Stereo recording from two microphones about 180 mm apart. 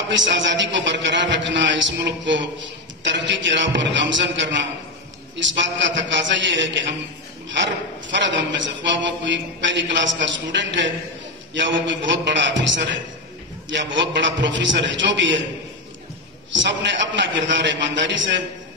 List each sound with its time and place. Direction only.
0.1 s a man's voice: 90° right
16.5 s a man's voice: 85° right